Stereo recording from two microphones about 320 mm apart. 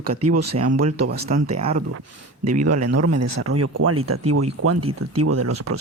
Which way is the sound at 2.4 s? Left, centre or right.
Right.